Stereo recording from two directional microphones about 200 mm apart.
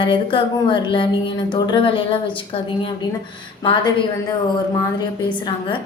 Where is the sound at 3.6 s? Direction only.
25° left (ahead or behind).